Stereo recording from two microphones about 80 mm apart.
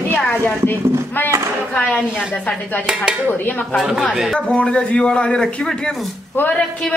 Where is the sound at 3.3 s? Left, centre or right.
Left.